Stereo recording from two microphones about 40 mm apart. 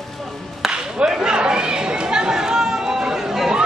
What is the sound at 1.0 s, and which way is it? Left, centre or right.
Chatter, right.